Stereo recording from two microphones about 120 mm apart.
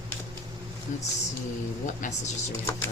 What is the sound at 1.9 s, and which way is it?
Speech, 90° left.